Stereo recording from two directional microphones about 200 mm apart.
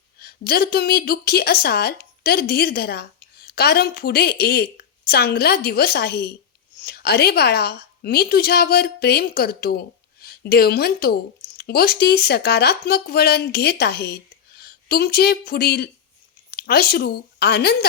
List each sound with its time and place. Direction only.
0.2 s a woman's voice: 50° left (ahead or behind)